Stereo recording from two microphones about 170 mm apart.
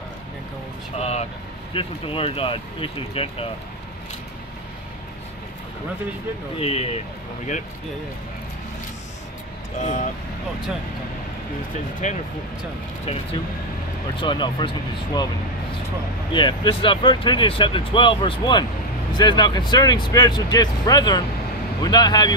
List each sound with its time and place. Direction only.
0.9 s speech: 35° left (ahead or behind)
6.6 s speech: 35° left (ahead or behind)
9.8 s speech: 45° left (ahead or behind)
12.0 s speech: 45° left (ahead or behind); by 15.2 s 30° left (ahead or behind)
16.3 s speech: 25° left (ahead or behind)